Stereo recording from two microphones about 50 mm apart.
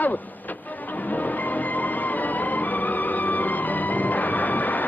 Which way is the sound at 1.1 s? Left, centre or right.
Left.